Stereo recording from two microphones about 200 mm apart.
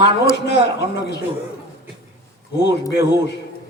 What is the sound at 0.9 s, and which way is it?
Speech, 55° left (ahead or behind).